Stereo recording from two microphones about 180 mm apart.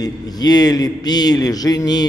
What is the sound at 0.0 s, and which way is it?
A man's voice, 20° left (ahead or behind).